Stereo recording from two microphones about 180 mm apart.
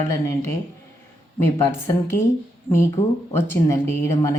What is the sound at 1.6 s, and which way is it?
Speech, 15° left (ahead or behind).